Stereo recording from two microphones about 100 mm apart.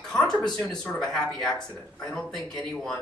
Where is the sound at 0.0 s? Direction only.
10° left (ahead or behind).